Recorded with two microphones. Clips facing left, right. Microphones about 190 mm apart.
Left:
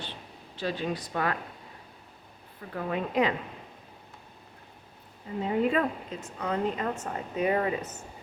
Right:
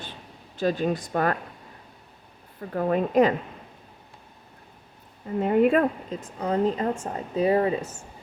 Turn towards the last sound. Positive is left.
turn(degrees=-30)  # may be behind; listen again after turning